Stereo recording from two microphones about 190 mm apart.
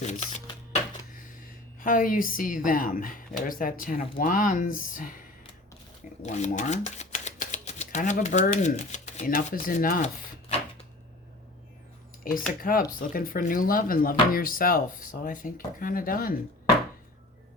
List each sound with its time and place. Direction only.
0.0 s shuffling cards: 35° left (ahead or behind)
1.8 s speech: 45° left (ahead or behind)
6.2 s speech: 40° left (ahead or behind)
12.2 s speech: 50° left (ahead or behind)